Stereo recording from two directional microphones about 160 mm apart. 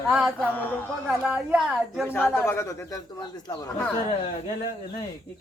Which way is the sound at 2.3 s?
15° left (ahead or behind).